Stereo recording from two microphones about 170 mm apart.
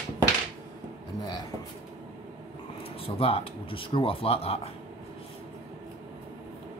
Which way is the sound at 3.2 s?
35° left (ahead or behind).